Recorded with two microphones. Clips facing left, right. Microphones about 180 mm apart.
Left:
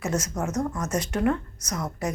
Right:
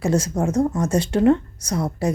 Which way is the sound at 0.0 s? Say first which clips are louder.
Right 7 dB; 30° right (ahead or behind).